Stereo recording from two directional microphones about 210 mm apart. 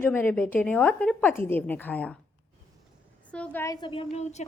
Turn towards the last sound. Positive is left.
turn(degrees=30)  # may be behind; listen again after turning